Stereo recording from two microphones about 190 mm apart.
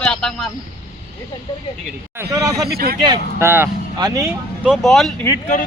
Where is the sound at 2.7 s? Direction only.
55° right (ahead or behind).